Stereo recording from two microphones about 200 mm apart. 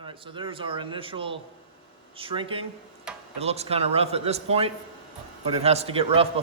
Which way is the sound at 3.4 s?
30° right (ahead or behind).